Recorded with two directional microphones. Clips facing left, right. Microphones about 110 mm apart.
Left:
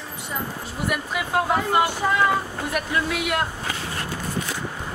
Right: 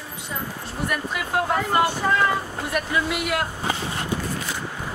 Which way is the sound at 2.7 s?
Centre (ahead or behind).